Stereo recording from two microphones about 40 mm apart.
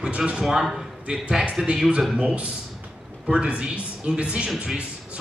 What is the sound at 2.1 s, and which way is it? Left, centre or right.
A man's voice, right.